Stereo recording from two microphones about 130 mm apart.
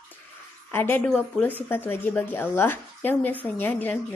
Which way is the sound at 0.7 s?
15° left (ahead or behind).